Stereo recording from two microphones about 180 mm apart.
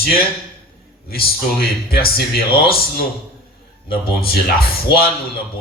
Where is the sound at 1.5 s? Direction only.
60° left (ahead or behind).